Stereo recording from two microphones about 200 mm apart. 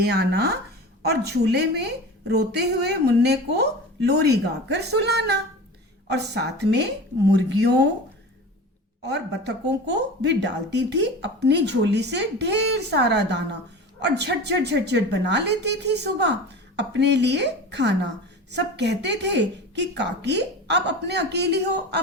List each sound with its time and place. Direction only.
0.0 s speech: 55° right (ahead or behind)
9.0 s speech: 60° right (ahead or behind)